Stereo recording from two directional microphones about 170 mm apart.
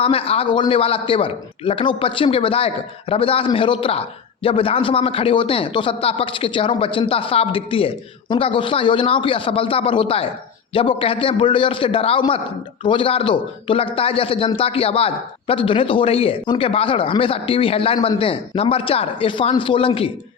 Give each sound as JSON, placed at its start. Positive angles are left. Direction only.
{"t": 0.0, "sound": "speech", "side_deg": 35}